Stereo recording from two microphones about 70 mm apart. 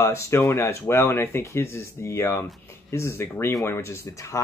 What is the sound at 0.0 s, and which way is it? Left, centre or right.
Speech, left.